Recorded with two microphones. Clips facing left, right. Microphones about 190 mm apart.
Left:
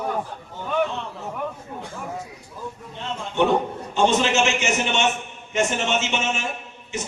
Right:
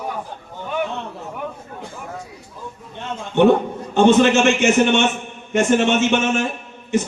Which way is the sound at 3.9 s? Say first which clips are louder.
Right 7 dB; 55° right (ahead or behind).